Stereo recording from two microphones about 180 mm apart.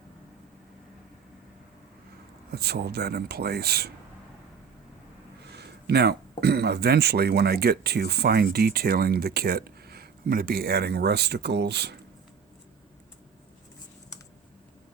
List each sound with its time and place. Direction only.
2.5 s speech: 60° right (ahead or behind)
5.5 s speech: 70° right (ahead or behind)